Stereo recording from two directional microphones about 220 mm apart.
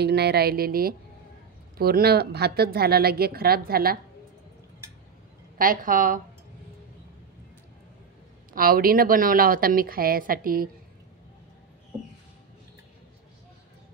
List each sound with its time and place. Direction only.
0.0 s a woman's voice: 45° right (ahead or behind)
5.6 s a woman's voice: 40° right (ahead or behind)
8.5 s a woman's voice: 40° right (ahead or behind)